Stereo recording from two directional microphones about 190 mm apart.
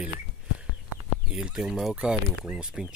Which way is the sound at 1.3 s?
5° right (ahead or behind).